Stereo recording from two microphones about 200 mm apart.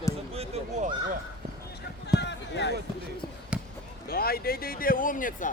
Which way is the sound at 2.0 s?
60° left (ahead or behind).